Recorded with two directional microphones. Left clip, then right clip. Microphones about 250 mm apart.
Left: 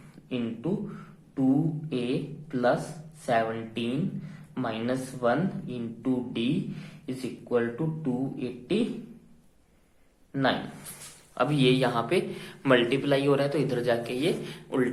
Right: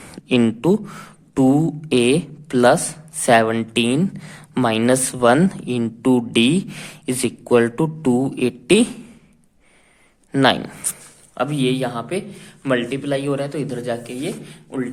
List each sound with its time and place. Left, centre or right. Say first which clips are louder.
0.1 s speech: right 15 dB; right
10.3 s speech: right 11 dB; right
11.3 s a man's voice: right 3 dB; right